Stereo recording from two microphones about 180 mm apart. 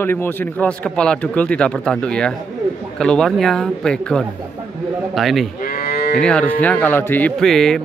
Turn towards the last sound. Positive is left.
turn(degrees=0)  # may be behind; listen again after turning